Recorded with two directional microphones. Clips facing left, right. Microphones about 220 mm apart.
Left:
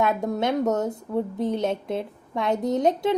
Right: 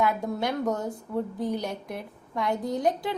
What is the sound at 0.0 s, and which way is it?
A woman's voice, 20° left (ahead or behind).